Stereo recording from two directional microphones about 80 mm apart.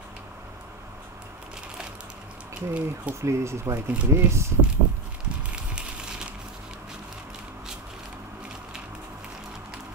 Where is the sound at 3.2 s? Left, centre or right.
Right.